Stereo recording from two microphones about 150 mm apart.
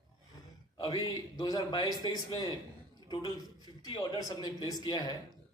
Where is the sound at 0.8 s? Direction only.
25° left (ahead or behind).